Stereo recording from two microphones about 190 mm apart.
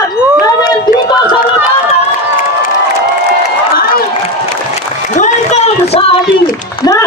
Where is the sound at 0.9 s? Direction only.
25° left (ahead or behind).